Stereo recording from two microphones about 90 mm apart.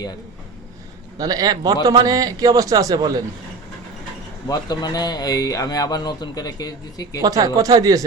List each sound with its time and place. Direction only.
1.2 s speech: 45° right (ahead or behind)
4.4 s speech: 45° left (ahead or behind)
7.2 s speech: 45° right (ahead or behind)